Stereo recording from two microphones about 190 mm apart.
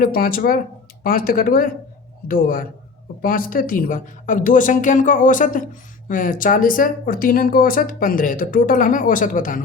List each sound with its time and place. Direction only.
0.0 s speech: 50° left (ahead or behind)